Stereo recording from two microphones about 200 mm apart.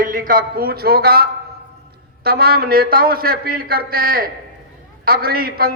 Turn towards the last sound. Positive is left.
turn(degrees=-50)  # may be behind; listen again after turning